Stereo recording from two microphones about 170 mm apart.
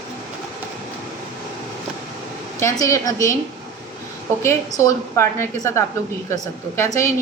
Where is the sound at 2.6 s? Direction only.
20° left (ahead or behind).